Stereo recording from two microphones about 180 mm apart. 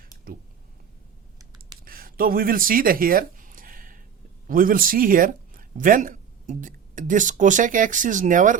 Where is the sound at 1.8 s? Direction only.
55° right (ahead or behind).